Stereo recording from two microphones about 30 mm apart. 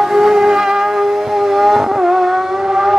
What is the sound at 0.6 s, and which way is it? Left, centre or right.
Vehicle, centre.